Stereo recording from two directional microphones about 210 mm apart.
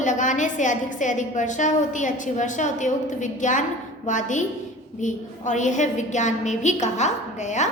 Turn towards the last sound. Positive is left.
turn(degrees=35)  # may be behind; listen again after turning